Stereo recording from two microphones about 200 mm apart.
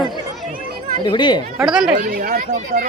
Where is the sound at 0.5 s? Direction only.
45° right (ahead or behind).